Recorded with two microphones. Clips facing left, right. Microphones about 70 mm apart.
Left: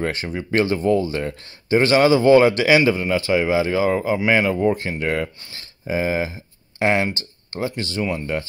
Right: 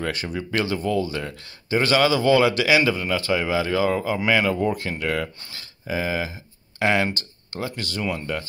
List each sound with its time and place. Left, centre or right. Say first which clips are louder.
0.0 s speech: left 3 dB; left